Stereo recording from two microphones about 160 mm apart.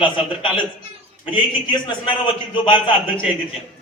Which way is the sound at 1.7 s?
30° left (ahead or behind).